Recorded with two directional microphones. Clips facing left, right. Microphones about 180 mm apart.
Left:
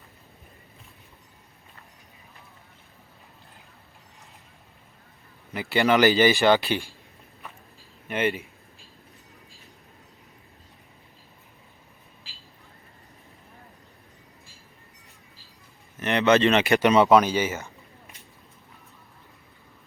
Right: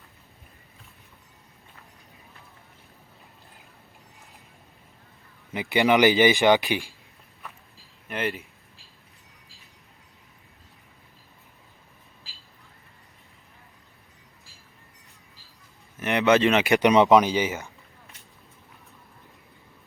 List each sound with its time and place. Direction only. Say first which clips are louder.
5.5 s speech: right 1 dB; 15° right (ahead or behind)
8.0 s speech: left 4 dB; centre (ahead or behind)
16.0 s speech: even; 10° right (ahead or behind)